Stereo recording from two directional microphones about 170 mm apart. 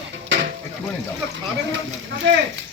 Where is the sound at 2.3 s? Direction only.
90° right.